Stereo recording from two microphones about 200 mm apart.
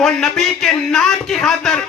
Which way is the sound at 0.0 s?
Centre (ahead or behind).